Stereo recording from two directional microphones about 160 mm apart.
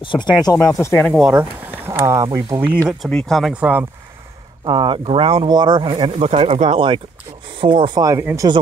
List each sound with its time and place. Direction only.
0.0 s speech: 30° left (ahead or behind)
0.6 s speech: centre (ahead or behind); by 2.2 s 15° right (ahead or behind)
2.2 s speech: 30° right (ahead or behind)
3.1 s speech: 5° left (ahead or behind)
4.6 s speech: 30° right (ahead or behind)